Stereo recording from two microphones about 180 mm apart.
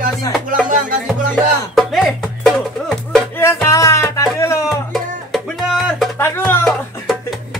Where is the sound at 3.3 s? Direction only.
15° left (ahead or behind).